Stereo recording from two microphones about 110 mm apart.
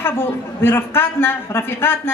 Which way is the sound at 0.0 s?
20° left (ahead or behind).